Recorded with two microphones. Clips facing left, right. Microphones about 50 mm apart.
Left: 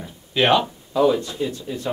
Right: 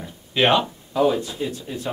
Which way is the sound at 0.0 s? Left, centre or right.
Centre.